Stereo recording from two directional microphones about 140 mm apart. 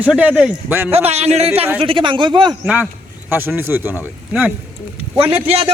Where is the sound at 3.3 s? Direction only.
15° right (ahead or behind).